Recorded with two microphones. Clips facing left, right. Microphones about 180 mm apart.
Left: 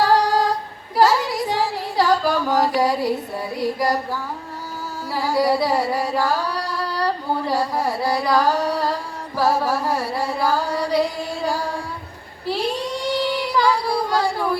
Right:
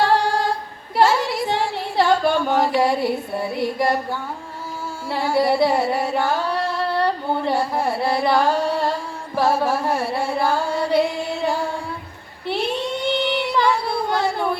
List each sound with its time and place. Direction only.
0.0 s female singing: 25° right (ahead or behind)
0.9 s a sound: 25° right (ahead or behind)
5.1 s carnatic music: 25° right (ahead or behind)
12.5 s child singing: 25° right (ahead or behind)